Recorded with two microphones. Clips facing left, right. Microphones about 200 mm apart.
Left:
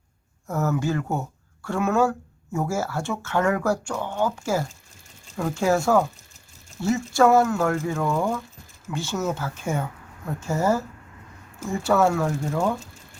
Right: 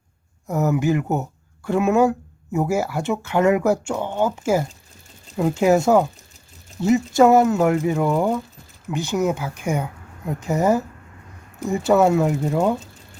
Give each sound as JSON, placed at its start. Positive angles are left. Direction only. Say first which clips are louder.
{"t": 0.4, "sound": "speech", "louder": "right 5 dB", "side_deg": -15}